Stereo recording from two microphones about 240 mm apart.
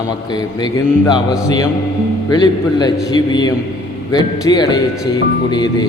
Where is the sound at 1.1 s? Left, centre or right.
Centre.